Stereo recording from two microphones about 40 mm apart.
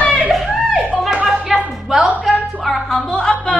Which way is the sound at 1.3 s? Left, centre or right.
Centre.